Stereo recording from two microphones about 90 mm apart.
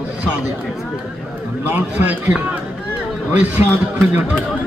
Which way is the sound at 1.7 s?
20° right (ahead or behind).